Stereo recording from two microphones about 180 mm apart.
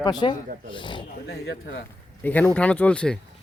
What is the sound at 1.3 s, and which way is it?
Speech, 70° left (ahead or behind).